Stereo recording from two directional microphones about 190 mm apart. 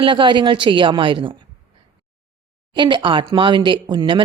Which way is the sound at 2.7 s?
25° right (ahead or behind).